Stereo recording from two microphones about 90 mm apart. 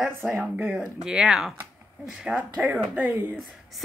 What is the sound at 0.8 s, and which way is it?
Speech, 5° right (ahead or behind).